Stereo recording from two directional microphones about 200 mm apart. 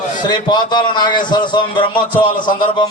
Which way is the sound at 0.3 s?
20° left (ahead or behind).